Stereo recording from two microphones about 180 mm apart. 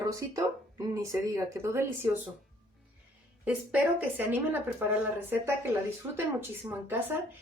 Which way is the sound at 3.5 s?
10° right (ahead or behind).